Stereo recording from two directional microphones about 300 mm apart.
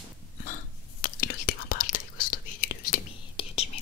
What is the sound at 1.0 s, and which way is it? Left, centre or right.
Whispering, left.